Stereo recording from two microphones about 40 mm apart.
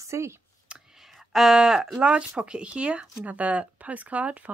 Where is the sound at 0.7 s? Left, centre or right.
Right.